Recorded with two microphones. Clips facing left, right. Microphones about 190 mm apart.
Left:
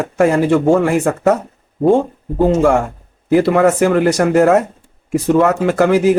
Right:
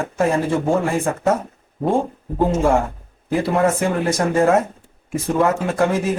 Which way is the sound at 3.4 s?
75° left (ahead or behind).